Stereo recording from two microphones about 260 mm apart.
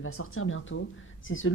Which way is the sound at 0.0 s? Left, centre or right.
Left.